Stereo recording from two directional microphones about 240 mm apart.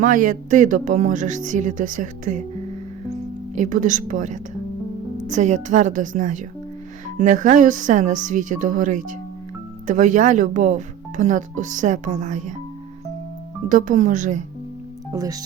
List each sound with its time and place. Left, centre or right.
0.0 s speech: right
3.5 s speech: right
13.7 s speech: right
15.1 s speech: centre